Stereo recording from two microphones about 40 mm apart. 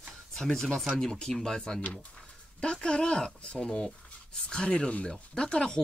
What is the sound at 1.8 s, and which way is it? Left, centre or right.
Speech, left.